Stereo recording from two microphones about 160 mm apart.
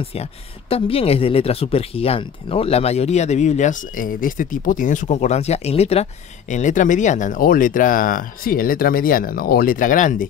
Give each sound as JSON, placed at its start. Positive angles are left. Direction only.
{"t": 0.0, "sound": "speech", "side_deg": 40}
{"t": 6.5, "sound": "speech", "side_deg": 50}